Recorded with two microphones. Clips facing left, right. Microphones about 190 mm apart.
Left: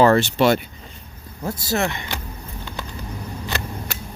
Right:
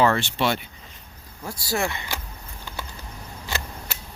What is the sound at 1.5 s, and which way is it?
Speech, 20° left (ahead or behind).